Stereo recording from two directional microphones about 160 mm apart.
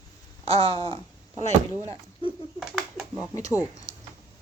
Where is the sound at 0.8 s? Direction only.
40° right (ahead or behind).